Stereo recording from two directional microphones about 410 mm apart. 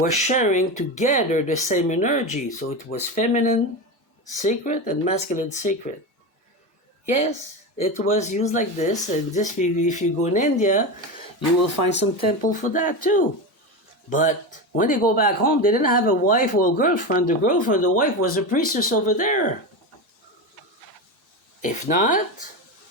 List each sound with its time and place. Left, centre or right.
0.0 s speech: centre
7.8 s speech: centre
11.9 s speech: left
21.6 s speech: centre